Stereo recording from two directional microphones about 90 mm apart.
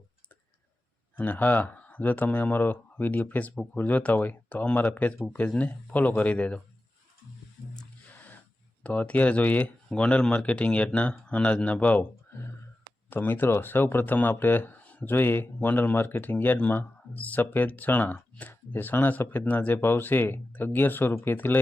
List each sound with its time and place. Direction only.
1.1 s speech: 20° left (ahead or behind)
7.8 s a sound: 15° left (ahead or behind)
8.8 s speech: 15° left (ahead or behind)